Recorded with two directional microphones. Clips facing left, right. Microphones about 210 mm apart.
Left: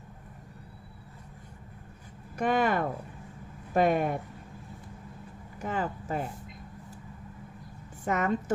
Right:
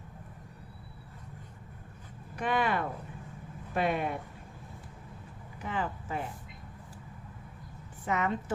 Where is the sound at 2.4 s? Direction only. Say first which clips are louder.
Left 4 dB; 45° left (ahead or behind).